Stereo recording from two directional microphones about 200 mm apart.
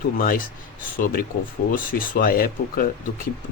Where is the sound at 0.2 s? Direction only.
45° left (ahead or behind).